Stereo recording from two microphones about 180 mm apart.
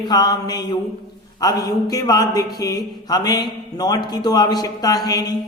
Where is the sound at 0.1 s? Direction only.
20° left (ahead or behind).